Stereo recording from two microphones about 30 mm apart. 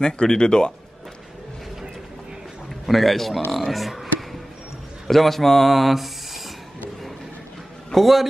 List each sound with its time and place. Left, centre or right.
0.0 s speech: left
2.9 s speech: centre
7.9 s a man's voice: centre